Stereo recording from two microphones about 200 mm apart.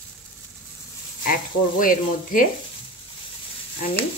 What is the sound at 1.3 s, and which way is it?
Speech, 45° left (ahead or behind).